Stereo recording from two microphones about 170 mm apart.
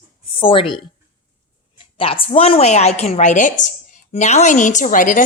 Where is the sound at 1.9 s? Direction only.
30° left (ahead or behind); by 5.2 s 50° left (ahead or behind).